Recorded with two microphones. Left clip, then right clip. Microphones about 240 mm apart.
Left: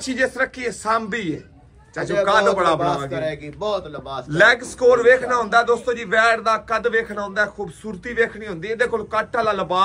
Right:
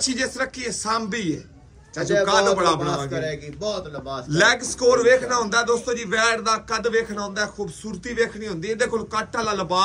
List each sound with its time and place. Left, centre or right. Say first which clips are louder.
0.0 s a man's voice: left 3 dB; centre
3.1 s a man's voice: left 2 dB; centre
4.3 s a man's voice: left 4 dB; centre